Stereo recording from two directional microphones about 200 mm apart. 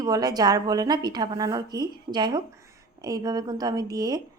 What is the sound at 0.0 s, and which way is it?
A woman's voice, 20° right (ahead or behind).